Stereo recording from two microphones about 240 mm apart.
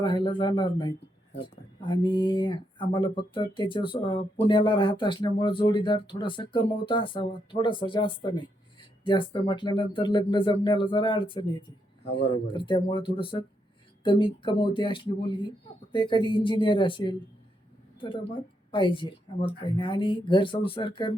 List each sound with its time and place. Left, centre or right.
0.0 s speech: centre
18.7 s speech: left